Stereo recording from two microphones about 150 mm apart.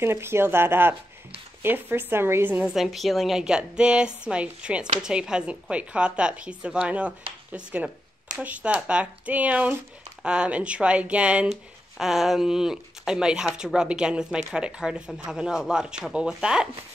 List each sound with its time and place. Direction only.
0.0 s a woman's voice: 15° right (ahead or behind)